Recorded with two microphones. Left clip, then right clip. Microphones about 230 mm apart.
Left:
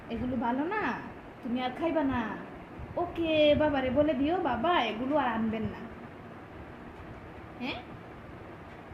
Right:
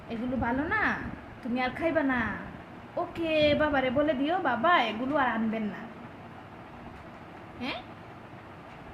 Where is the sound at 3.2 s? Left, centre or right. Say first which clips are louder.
Even; right.